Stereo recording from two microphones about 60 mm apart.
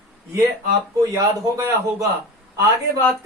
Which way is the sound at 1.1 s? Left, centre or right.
Right.